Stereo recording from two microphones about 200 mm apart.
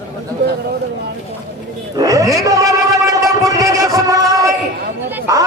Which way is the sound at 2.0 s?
15° right (ahead or behind).